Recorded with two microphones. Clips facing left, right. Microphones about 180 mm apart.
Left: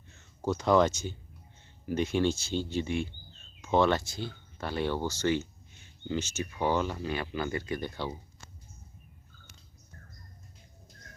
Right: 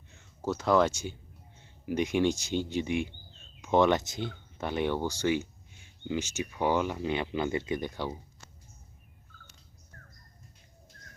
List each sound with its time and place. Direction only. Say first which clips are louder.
0.4 s speech: left 1 dB; 5° right (ahead or behind)